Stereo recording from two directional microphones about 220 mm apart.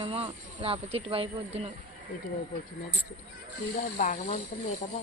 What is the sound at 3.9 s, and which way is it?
Speech, 35° left (ahead or behind).